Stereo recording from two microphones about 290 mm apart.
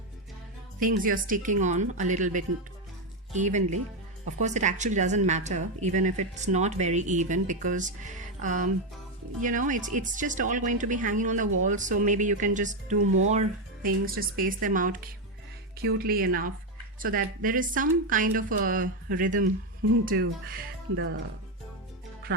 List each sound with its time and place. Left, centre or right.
0.8 s a woman's voice: right